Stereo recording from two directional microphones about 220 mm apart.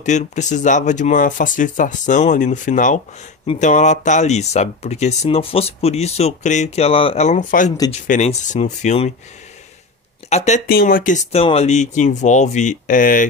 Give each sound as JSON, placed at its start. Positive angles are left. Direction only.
{"t": 0.0, "sound": "speech", "side_deg": 30}
{"t": 10.3, "sound": "speech", "side_deg": 30}